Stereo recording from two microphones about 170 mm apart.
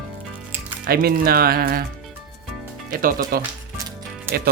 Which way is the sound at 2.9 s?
55° right (ahead or behind).